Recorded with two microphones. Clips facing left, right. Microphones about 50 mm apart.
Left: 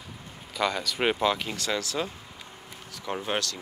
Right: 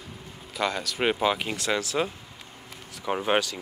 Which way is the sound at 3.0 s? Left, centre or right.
Right.